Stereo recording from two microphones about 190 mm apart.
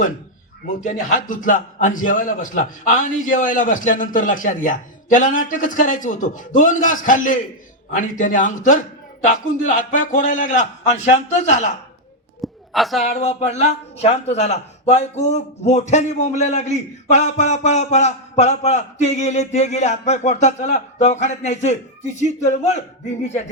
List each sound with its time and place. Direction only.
0.8 s a man's voice: 45° left (ahead or behind)
12.4 s a sound: centre (ahead or behind)
13.0 s a man's voice: 35° left (ahead or behind)